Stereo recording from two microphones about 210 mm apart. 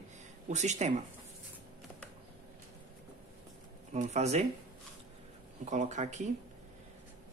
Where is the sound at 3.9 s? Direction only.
30° right (ahead or behind).